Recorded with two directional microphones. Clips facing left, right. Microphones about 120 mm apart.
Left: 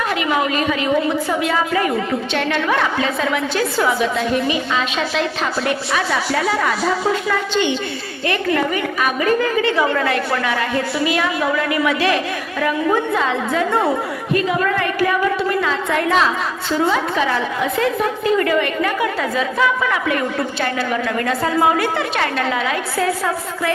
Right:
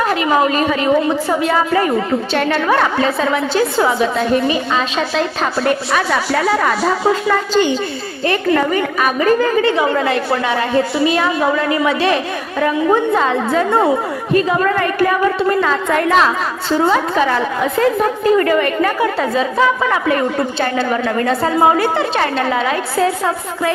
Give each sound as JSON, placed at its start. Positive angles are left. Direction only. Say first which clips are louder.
{"t": 0.0, "sound": "a woman's voice", "louder": "right 5 dB", "side_deg": -40}
{"t": 9.7, "sound": "a woman's voice", "louder": "right 2 dB", "side_deg": -20}